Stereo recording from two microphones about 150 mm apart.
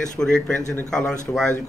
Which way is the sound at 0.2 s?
10° left (ahead or behind).